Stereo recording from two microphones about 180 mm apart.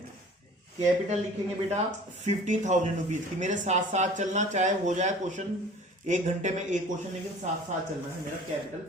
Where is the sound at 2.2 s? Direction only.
40° right (ahead or behind).